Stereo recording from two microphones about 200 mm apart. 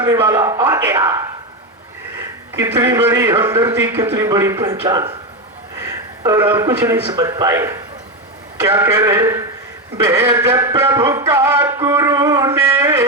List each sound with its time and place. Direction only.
0.0 s music: 15° right (ahead or behind)
2.8 s music: 15° right (ahead or behind)
3.4 s a man's voice: 25° right (ahead or behind)
3.7 s music: 10° right (ahead or behind)
5.7 s speech: 15° right (ahead or behind)
8.6 s music: 15° right (ahead or behind)